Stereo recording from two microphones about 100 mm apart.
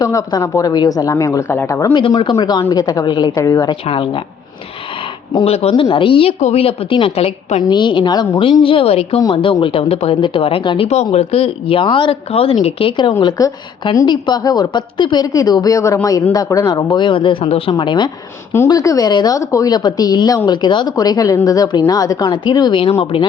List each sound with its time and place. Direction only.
0.0 s a woman's voice: 35° left (ahead or behind)
1.9 s speech: 55° left (ahead or behind)
2.4 s a woman's voice: 40° left (ahead or behind)
3.8 s speech: 60° left (ahead or behind)
5.5 s a woman's voice: 90° left
7.6 s a woman's voice: 50° left (ahead or behind)
8.6 s a woman's voice: 65° left (ahead or behind)
9.3 s speech: 60° left (ahead or behind)
10.9 s a woman's voice: 90° left; by 13.1 s 65° left (ahead or behind)
13.2 s a woman's voice: 35° left (ahead or behind)
14.1 s a woman's voice: 45° left (ahead or behind); by 17.6 s 65° left (ahead or behind)
17.7 s a woman's voice: 50° left (ahead or behind)
18.7 s a woman's voice: 35° left (ahead or behind)
22.8 s a woman's voice: 75° left (ahead or behind)